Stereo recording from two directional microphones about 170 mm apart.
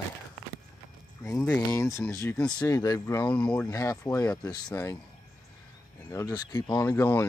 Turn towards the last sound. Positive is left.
turn(degrees=15)  # may be behind; listen again after turning